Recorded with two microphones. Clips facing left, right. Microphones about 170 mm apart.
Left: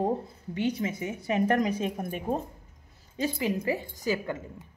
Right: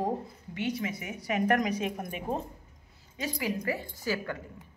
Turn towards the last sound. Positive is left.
turn(degrees=20)  # may be behind; listen again after turning